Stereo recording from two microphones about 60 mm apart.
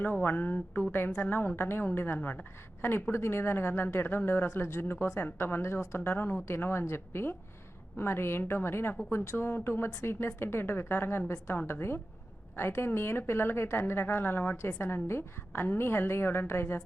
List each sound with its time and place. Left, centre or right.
0.0 s a woman's voice: left
2.8 s a woman's voice: left
6.0 s a woman's voice: left